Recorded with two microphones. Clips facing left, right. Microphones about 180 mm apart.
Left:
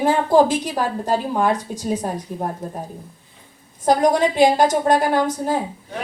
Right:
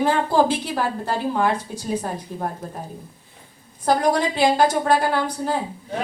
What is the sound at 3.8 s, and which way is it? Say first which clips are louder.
A woman's voice: left 3 dB; 20° left (ahead or behind).